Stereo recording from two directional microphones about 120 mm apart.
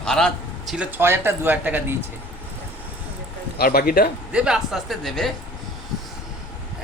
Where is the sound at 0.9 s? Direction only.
20° right (ahead or behind).